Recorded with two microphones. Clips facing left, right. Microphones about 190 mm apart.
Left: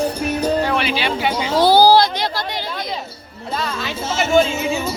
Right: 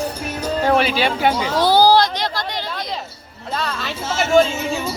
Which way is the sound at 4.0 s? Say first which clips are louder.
Left 1 dB; 20° left (ahead or behind).